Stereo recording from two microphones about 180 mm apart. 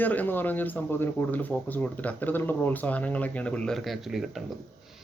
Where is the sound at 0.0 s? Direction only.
10° left (ahead or behind).